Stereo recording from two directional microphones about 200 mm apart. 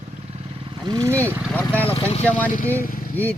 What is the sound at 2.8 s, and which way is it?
Speech, 45° left (ahead or behind).